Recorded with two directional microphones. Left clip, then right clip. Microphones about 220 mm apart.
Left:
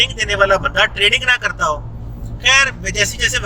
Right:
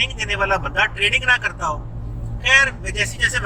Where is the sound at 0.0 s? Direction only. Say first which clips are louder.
Left 6 dB; 40° left (ahead or behind).